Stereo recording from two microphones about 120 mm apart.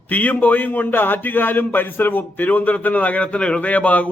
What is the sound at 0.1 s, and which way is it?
A man's voice, 15° left (ahead or behind).